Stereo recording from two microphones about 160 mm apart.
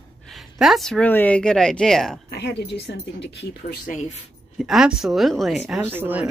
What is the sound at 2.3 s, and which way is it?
Speech, 90° left.